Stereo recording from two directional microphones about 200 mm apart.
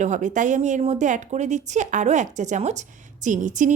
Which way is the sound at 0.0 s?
35° right (ahead or behind).